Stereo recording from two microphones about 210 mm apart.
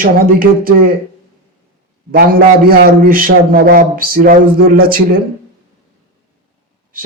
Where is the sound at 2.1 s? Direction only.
45° right (ahead or behind).